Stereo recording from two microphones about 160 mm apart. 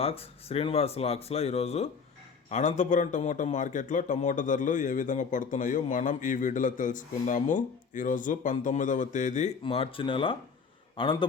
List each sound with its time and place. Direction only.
0.0 s a man's voice: 40° left (ahead or behind)
9.6 s speech: 35° left (ahead or behind)